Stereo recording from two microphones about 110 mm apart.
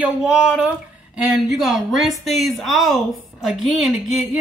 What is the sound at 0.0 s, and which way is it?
Speech, 10° right (ahead or behind).